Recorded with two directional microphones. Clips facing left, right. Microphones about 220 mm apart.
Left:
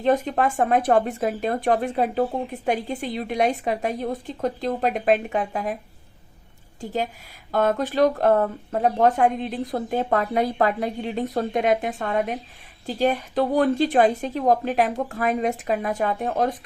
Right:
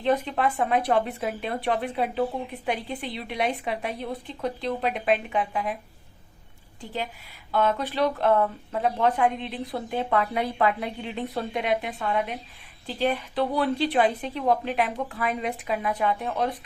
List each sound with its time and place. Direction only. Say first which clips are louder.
0.0 s speech: left 3 dB; 45° left (ahead or behind)
7.5 s speech: left 3 dB; 45° left (ahead or behind)